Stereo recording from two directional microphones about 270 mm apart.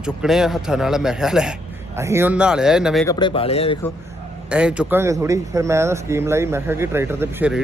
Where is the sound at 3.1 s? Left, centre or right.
Centre.